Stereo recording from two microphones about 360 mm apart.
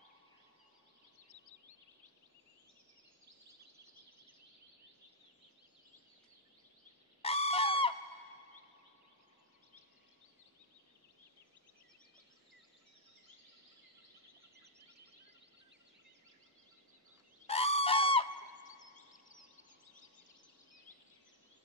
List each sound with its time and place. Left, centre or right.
7.2 s fowl: centre
17.5 s goose: centre